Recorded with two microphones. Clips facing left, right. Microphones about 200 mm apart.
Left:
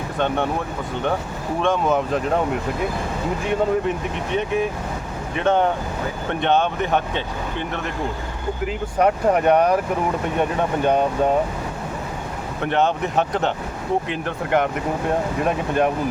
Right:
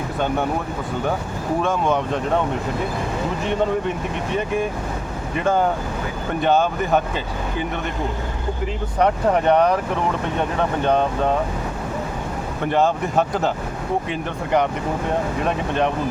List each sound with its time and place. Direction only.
1.6 s speech: centre (ahead or behind)
3.4 s speech: centre (ahead or behind)
8.6 s speech: 5° left (ahead or behind)
12.6 s speech: centre (ahead or behind)